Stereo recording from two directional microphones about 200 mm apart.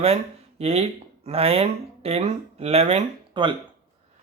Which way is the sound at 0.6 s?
30° right (ahead or behind).